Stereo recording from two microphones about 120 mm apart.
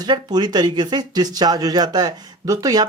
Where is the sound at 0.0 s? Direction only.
35° right (ahead or behind).